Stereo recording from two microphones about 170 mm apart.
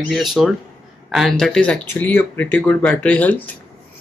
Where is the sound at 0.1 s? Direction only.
Centre (ahead or behind).